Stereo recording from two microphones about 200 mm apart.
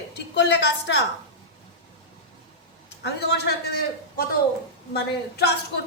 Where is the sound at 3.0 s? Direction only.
55° left (ahead or behind).